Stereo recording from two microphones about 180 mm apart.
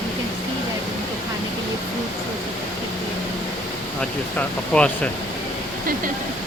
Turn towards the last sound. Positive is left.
turn(degrees=5)  # may be behind; listen again after turning